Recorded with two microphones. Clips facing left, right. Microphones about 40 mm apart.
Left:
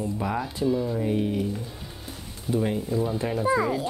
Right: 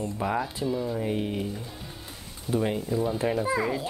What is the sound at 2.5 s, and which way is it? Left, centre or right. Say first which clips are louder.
Speech: left 1 dB; centre.